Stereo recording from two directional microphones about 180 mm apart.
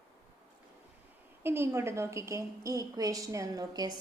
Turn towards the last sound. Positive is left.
turn(degrees=-20)  # may be behind; listen again after turning